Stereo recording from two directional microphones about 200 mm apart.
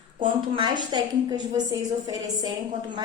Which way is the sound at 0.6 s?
20° right (ahead or behind).